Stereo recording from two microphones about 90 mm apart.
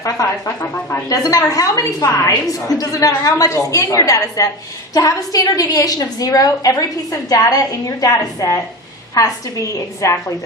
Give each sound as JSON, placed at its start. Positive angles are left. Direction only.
{"t": 0.0, "sound": "a woman's voice", "side_deg": 35}